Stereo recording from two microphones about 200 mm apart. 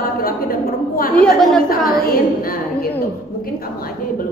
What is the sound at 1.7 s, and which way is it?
Speech, 45° left (ahead or behind).